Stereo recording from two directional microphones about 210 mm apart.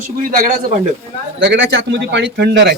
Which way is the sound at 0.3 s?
40° right (ahead or behind).